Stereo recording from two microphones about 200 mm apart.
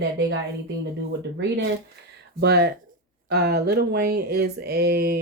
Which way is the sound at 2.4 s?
50° right (ahead or behind).